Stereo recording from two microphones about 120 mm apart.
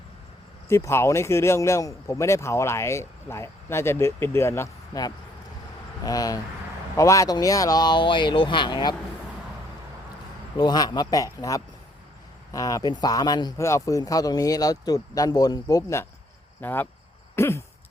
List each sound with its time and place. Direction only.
0.7 s speech: 20° left (ahead or behind)
6.1 s speech: 30° left (ahead or behind)
10.6 s speech: 35° left (ahead or behind); by 16.9 s 15° left (ahead or behind)
17.3 s a sound: 20° left (ahead or behind)